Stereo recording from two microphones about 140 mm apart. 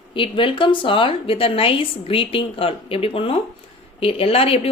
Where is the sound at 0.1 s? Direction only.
40° left (ahead or behind).